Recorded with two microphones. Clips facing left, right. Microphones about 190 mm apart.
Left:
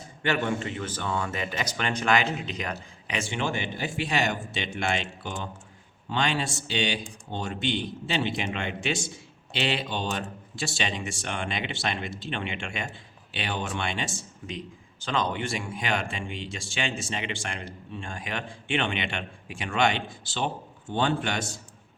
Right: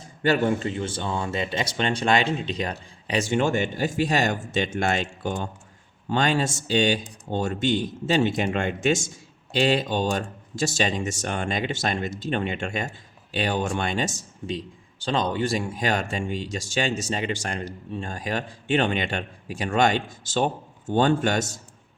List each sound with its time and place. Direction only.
0.2 s speech: 35° right (ahead or behind)